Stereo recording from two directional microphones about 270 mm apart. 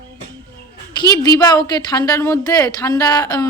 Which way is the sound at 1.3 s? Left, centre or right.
Centre.